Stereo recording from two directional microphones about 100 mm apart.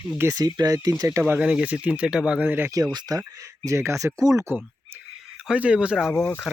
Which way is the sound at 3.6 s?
25° right (ahead or behind).